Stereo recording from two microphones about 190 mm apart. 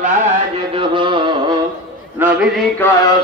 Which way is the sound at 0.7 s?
25° right (ahead or behind).